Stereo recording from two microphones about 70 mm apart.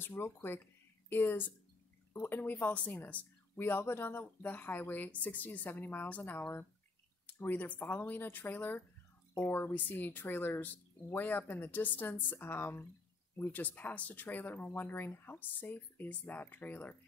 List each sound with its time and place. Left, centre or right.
0.0 s speech: left